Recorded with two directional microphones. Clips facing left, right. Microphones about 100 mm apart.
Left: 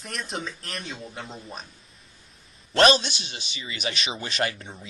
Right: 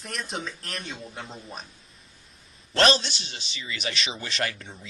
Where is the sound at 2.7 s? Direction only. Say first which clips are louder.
Left 3 dB; 15° left (ahead or behind).